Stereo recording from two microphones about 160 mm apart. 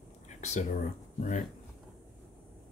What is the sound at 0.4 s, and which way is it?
Speech, 45° left (ahead or behind).